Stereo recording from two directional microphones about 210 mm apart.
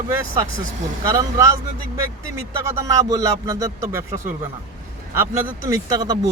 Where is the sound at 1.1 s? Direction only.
15° right (ahead or behind).